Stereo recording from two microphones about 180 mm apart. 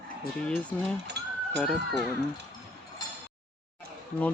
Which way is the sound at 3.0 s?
20° left (ahead or behind).